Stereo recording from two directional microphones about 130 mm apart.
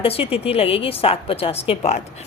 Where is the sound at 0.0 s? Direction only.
45° left (ahead or behind).